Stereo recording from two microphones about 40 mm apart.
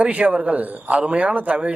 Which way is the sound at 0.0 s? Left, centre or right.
Right.